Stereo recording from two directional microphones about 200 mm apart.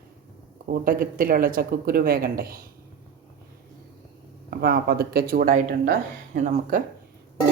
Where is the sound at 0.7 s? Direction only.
45° right (ahead or behind).